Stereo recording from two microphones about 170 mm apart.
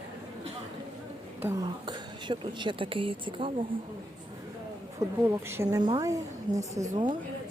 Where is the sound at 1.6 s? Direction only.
25° right (ahead or behind).